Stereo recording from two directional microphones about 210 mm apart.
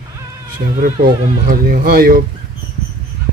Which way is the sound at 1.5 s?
45° right (ahead or behind).